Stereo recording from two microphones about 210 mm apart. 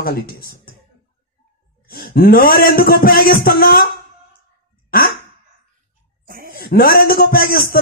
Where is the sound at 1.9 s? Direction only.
45° left (ahead or behind).